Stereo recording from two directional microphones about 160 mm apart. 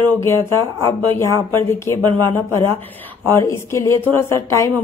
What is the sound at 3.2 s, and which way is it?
A woman's voice, 15° left (ahead or behind).